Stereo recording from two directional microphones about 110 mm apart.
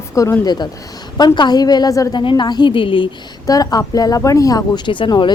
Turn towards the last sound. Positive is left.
turn(degrees=50)  # may be behind; listen again after turning